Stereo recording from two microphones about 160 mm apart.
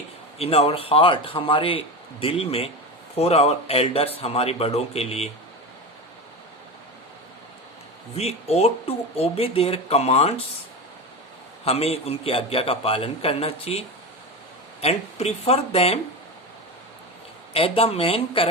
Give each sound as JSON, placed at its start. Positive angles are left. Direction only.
{"t": 0.3, "sound": "speech", "side_deg": 40}
{"t": 8.1, "sound": "speech", "side_deg": 40}
{"t": 11.6, "sound": "speech", "side_deg": 40}
{"t": 17.5, "sound": "speech", "side_deg": 35}